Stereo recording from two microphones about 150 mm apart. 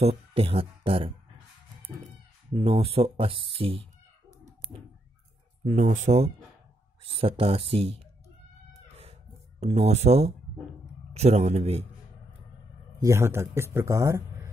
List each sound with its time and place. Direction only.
0.0 s speech: 40° right (ahead or behind)
2.5 s speech: 40° right (ahead or behind)
5.7 s speech: 55° right (ahead or behind); by 7.9 s 40° right (ahead or behind)
9.6 s speech: 45° right (ahead or behind)
13.0 s speech: 20° right (ahead or behind)